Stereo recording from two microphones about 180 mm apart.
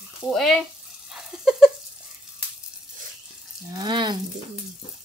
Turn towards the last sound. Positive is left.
turn(degrees=-25)  # may be behind; listen again after turning